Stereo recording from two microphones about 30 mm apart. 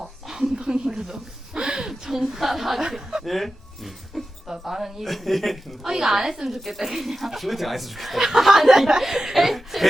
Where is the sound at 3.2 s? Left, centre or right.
Centre.